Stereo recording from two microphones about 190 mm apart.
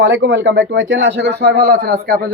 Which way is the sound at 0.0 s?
75° right (ahead or behind).